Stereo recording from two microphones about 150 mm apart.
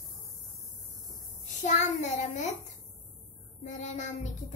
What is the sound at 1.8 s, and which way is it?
Child singing, 50° left (ahead or behind).